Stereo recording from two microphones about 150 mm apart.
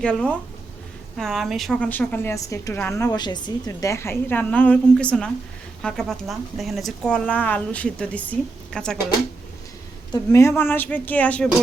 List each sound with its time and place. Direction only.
0.0 s a woman's voice: 5° left (ahead or behind)
1.9 s a woman's voice: 10° left (ahead or behind)
10.1 s a woman's voice: 20° left (ahead or behind)